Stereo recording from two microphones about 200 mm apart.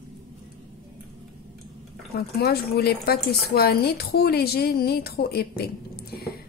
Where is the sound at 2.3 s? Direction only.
50° left (ahead or behind).